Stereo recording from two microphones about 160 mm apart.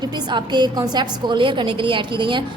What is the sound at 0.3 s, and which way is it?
A woman's voice, 25° right (ahead or behind).